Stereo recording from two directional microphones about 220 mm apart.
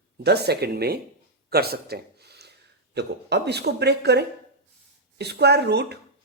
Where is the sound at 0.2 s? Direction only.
50° right (ahead or behind).